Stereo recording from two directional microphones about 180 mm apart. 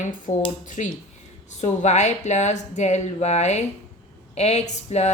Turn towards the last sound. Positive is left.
turn(degrees=40)  # may be behind; listen again after turning